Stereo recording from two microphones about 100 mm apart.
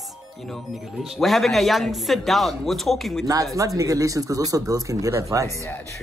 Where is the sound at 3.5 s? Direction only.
35° right (ahead or behind).